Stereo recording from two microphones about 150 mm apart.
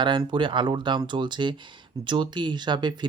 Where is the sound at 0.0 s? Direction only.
30° right (ahead or behind).